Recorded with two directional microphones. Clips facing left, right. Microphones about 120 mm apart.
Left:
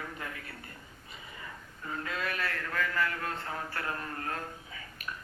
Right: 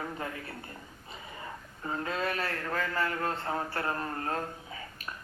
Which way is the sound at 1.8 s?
30° right (ahead or behind).